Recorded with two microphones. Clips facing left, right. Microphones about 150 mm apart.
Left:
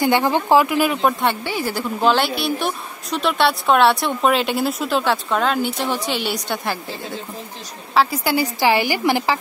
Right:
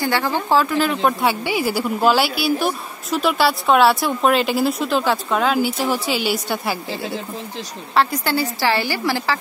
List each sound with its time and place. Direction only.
0.0 s a woman's voice: 20° left (ahead or behind)
1.2 s a woman's voice: 10° right (ahead or behind)
7.9 s a woman's voice: 5° left (ahead or behind)